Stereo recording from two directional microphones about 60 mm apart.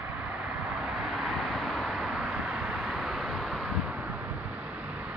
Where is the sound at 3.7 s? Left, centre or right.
Centre.